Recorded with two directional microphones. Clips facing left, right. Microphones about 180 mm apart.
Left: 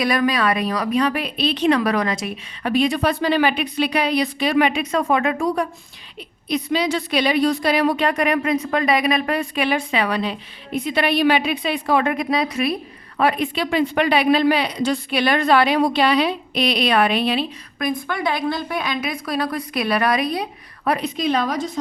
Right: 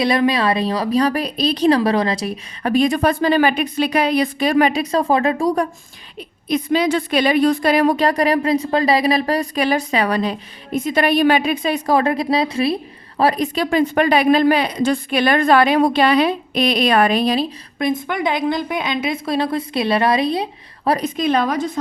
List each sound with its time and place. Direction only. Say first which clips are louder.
0.0 s a woman's voice: right 3 dB; 25° right (ahead or behind)
6.1 s a woman's voice: right 3 dB; 50° right (ahead or behind)
17.7 s a woman's voice: right 3 dB; 25° right (ahead or behind)
21.0 s a woman's voice: right 3 dB; 50° right (ahead or behind)